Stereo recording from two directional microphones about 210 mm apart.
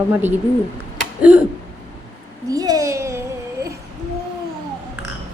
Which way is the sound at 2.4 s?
15° right (ahead or behind).